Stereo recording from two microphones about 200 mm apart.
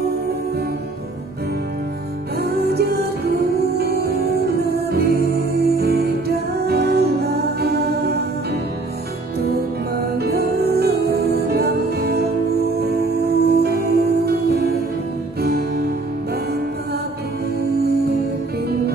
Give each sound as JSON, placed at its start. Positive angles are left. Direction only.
{"t": 2.7, "sound": "music", "side_deg": -50}
{"t": 9.5, "sound": "music", "side_deg": -50}